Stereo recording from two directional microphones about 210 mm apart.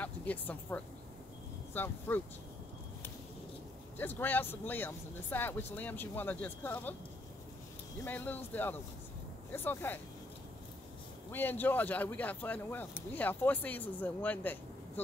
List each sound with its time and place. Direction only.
0.0 s speech: 10° left (ahead or behind)
4.0 s speech: 10° left (ahead or behind)
8.0 s speech: 10° left (ahead or behind)
11.3 s speech: 10° left (ahead or behind)